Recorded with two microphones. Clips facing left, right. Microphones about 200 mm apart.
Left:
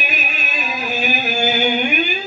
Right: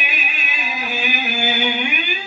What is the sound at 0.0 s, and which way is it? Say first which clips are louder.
Music: left 3 dB; 45° left (ahead or behind).